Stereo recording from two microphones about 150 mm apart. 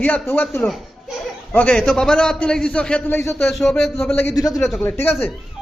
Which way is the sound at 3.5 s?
Centre (ahead or behind).